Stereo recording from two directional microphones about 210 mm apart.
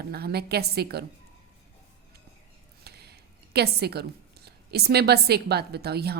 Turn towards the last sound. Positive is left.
turn(degrees=-50)  # may be behind; listen again after turning